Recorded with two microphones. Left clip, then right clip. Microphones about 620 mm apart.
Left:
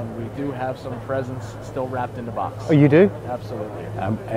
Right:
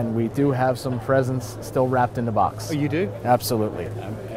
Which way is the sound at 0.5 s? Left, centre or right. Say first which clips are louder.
Right 5 dB; right.